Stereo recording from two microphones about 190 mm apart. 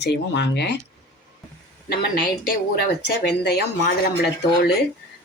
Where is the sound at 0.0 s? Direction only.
65° left (ahead or behind).